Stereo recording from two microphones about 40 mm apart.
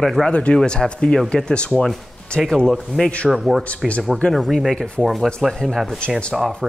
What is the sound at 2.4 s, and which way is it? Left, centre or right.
Speech, centre.